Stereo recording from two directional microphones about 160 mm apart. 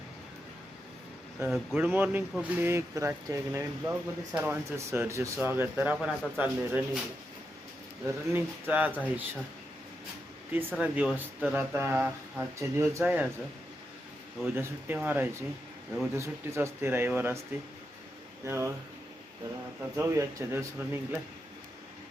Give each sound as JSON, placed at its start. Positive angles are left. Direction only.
{"t": 1.4, "sound": "speech", "side_deg": -15}
{"t": 8.0, "sound": "speech", "side_deg": -15}
{"t": 10.5, "sound": "speech", "side_deg": -10}
{"t": 14.4, "sound": "speech", "side_deg": -15}
{"t": 18.4, "sound": "speech", "side_deg": -15}
{"t": 20.0, "sound": "speech", "side_deg": -20}